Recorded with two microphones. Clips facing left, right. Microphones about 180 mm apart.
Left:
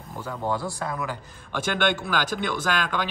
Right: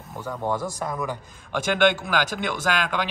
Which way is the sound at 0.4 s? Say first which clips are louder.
Right 1 dB; 15° right (ahead or behind).